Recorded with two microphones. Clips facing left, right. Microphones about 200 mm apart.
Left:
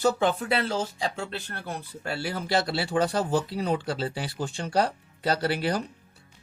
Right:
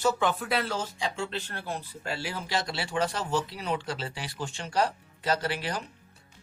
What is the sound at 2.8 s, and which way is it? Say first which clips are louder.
Speech: left 4 dB; 35° left (ahead or behind).